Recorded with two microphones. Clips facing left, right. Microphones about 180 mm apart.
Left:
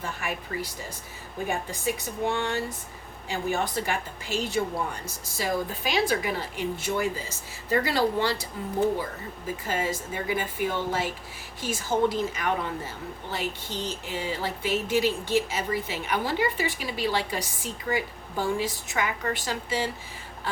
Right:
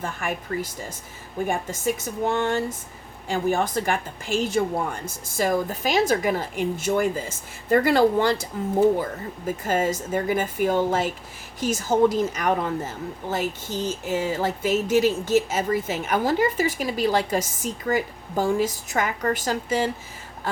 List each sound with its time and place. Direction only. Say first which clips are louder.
0.0 s speech: right 4 dB; 50° right (ahead or behind)
9.5 s speech: right 6 dB; 45° right (ahead or behind)